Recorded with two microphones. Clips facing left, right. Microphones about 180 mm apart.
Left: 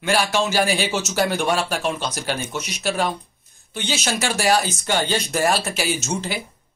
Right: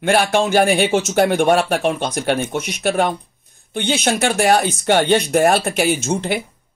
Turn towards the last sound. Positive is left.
turn(degrees=-55)  # may be behind; listen again after turning